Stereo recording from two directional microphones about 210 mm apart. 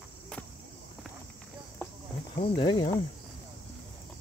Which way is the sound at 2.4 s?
25° left (ahead or behind).